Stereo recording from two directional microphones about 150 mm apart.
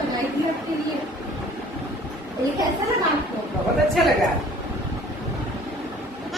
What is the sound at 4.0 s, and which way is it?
Speech, centre (ahead or behind).